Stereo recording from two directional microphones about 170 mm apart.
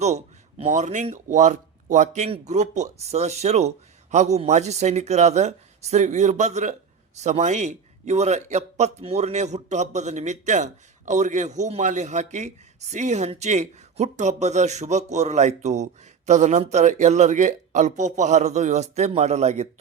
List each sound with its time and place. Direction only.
0.6 s speech: 45° right (ahead or behind)